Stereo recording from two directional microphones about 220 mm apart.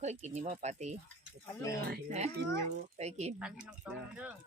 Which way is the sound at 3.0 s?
30° right (ahead or behind).